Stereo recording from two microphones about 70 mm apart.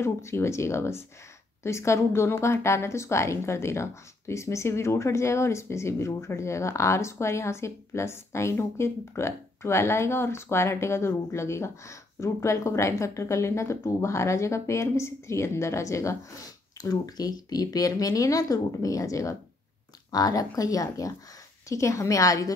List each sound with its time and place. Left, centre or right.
0.0 s speech: left
16.8 s speech: left
20.1 s speech: left
21.6 s speech: left